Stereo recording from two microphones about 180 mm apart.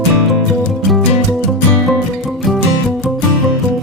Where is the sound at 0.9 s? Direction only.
Centre (ahead or behind).